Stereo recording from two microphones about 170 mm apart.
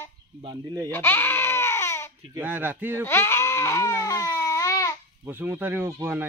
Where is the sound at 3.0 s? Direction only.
15° left (ahead or behind).